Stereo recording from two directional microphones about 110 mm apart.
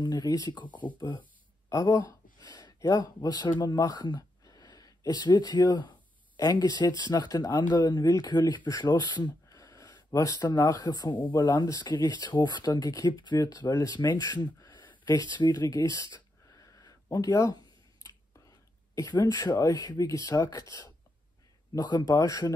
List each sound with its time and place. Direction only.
0.0 s speech: 40° left (ahead or behind)
0.7 s speech: 15° left (ahead or behind)
0.9 s speech: 45° left (ahead or behind); by 17.6 s 30° left (ahead or behind)
18.9 s speech: 35° left (ahead or behind)